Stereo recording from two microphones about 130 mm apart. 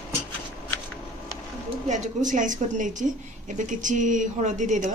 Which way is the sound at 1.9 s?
70° right (ahead or behind).